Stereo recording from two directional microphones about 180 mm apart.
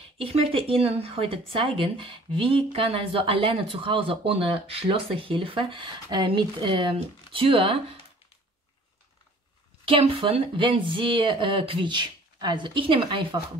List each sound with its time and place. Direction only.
0.2 s speech: 30° right (ahead or behind)
9.8 s speech: 30° right (ahead or behind)